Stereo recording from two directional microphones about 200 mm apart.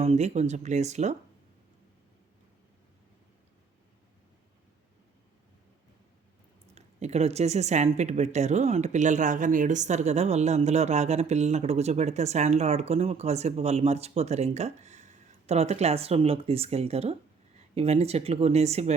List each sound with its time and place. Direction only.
0.0 s speech: 30° right (ahead or behind)
6.7 s speech: 35° right (ahead or behind)